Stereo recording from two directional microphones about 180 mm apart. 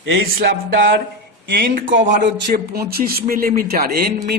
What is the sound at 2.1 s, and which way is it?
A man's voice, 55° right (ahead or behind).